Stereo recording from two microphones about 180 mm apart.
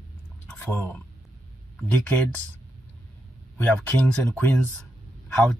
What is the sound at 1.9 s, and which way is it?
Speech, 5° left (ahead or behind).